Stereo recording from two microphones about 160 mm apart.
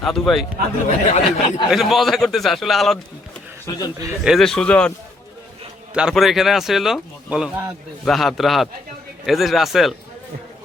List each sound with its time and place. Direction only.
0.0 s speech: centre (ahead or behind)
0.9 s speech: 40° left (ahead or behind)
1.7 s speech: centre (ahead or behind)
3.7 s a man's voice: 20° left (ahead or behind)
4.2 s speech: centre (ahead or behind)
5.9 s speech: 5° right (ahead or behind)